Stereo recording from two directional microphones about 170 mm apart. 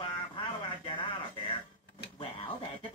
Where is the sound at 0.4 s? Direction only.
30° left (ahead or behind).